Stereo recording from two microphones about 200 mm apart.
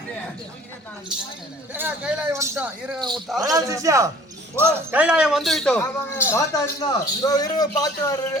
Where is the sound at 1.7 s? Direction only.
10° right (ahead or behind); by 7.9 s 20° left (ahead or behind).